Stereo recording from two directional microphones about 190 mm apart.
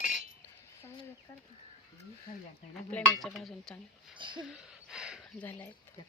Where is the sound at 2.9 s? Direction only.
10° left (ahead or behind).